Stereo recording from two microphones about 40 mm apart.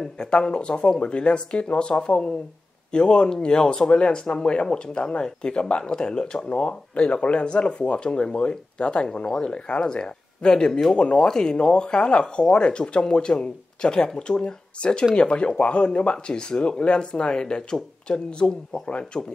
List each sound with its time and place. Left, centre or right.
0.2 s speech: left